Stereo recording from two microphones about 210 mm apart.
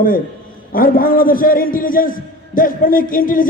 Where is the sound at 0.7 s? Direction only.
45° left (ahead or behind).